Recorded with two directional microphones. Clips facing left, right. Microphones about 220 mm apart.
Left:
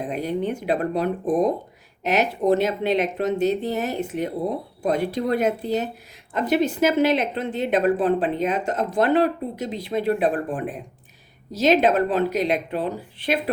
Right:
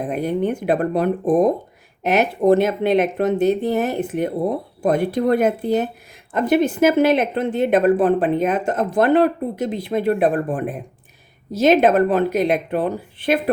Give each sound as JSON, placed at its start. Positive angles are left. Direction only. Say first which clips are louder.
{"t": 0.0, "sound": "speech", "louder": "right 4 dB", "side_deg": -55}